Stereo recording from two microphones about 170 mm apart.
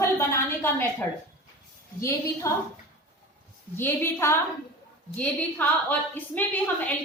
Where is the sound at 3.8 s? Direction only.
15° left (ahead or behind).